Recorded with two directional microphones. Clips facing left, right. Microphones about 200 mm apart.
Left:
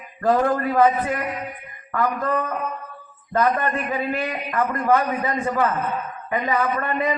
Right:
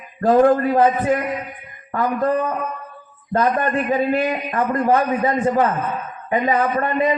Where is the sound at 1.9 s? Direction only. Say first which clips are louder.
Right 4 dB; 30° right (ahead or behind).